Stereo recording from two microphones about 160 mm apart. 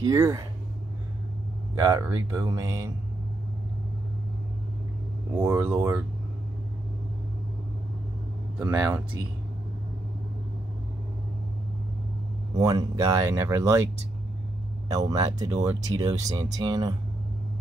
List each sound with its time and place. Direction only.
0.0 s speech: 20° right (ahead or behind)
1.8 s speech: 20° right (ahead or behind)
5.4 s speech: 15° right (ahead or behind)
8.5 s speech: 10° right (ahead or behind)
12.5 s speech: 20° right (ahead or behind)
14.9 s speech: 20° right (ahead or behind)